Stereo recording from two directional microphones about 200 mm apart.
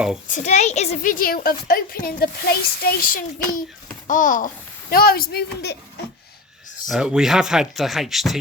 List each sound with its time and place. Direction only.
0.3 s a woman's voice: 35° left (ahead or behind)
6.8 s speech: 5° right (ahead or behind)